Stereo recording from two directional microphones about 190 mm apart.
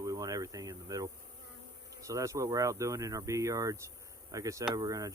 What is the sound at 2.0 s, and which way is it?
Speech, 15° right (ahead or behind).